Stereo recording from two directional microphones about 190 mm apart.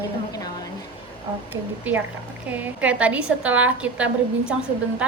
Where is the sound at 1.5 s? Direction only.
10° right (ahead or behind).